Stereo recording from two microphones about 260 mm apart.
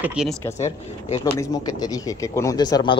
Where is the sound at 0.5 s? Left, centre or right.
Left.